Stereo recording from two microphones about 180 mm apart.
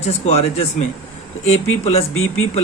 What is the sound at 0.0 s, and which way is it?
Speech, 35° left (ahead or behind).